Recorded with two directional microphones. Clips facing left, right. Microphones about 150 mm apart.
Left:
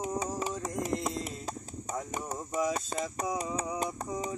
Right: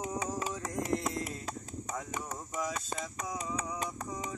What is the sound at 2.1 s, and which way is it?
Music, 35° left (ahead or behind).